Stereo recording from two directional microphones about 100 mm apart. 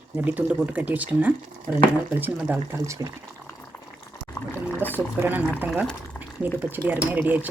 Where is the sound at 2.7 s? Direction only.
25° right (ahead or behind).